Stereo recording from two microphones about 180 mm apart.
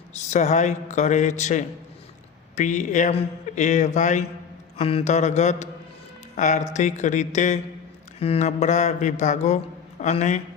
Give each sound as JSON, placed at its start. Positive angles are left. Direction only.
{"t": 0.3, "sound": "a man's voice", "side_deg": 40}